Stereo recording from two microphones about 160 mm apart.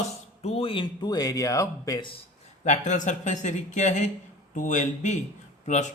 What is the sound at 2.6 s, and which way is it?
Speech, 50° left (ahead or behind).